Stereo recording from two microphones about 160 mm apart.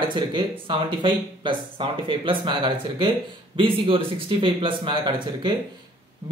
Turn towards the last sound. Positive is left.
turn(degrees=-30)  # may be behind; listen again after turning